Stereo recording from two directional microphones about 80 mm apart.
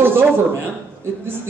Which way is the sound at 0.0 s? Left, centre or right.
Right.